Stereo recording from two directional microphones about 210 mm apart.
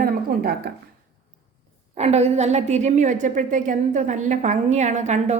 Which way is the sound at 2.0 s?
30° right (ahead or behind).